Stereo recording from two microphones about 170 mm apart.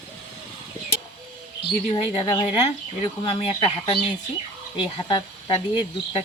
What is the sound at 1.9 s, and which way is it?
Speech, 25° left (ahead or behind).